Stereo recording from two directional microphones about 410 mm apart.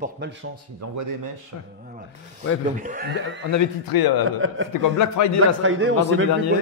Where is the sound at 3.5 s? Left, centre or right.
Left.